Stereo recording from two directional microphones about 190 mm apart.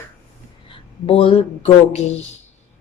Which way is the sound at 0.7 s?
30° left (ahead or behind).